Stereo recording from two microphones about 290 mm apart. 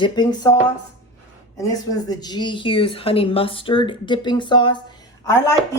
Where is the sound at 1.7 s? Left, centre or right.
Centre.